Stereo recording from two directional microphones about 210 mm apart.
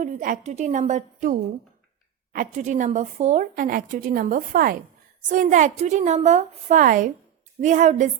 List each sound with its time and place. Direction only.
0.0 s speech: 40° right (ahead or behind)